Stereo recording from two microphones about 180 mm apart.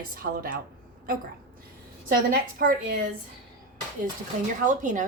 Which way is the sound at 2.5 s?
50° right (ahead or behind).